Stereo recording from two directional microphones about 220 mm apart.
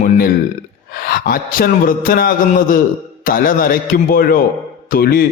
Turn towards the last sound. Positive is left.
turn(degrees=45)  # may be behind; listen again after turning